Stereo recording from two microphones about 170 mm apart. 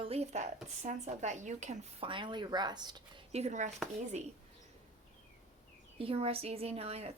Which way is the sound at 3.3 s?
40° right (ahead or behind).